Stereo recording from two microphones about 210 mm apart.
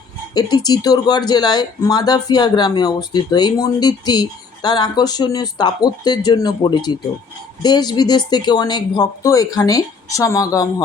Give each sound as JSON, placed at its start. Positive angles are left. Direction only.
{"t": 0.3, "sound": "speech", "side_deg": 20}